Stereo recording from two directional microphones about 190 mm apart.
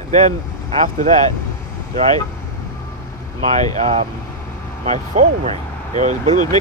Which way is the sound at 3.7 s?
35° right (ahead or behind).